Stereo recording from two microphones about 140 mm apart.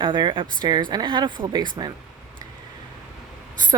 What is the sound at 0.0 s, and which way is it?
Speech, 35° right (ahead or behind).